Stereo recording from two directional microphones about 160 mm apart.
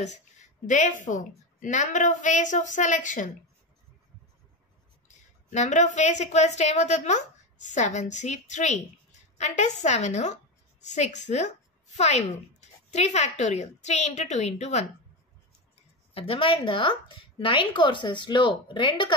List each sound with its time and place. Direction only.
0.0 s a woman's voice: 50° left (ahead or behind)
5.0 s a woman's voice: 50° left (ahead or behind)
16.1 s a woman's voice: 35° left (ahead or behind)